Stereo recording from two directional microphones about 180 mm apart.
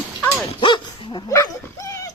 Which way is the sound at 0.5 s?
25° left (ahead or behind).